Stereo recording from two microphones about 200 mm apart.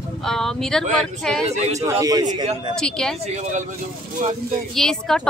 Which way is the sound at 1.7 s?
15° right (ahead or behind).